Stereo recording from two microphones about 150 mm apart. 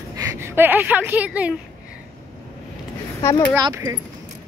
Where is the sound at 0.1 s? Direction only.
20° right (ahead or behind).